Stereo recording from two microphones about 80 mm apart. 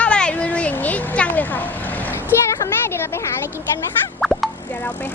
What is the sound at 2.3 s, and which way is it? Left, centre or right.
Speech, left.